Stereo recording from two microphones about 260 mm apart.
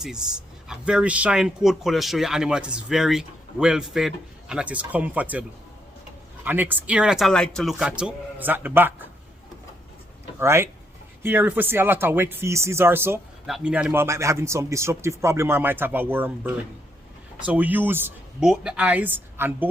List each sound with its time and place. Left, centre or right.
0.7 s speech: centre
10.4 s speech: centre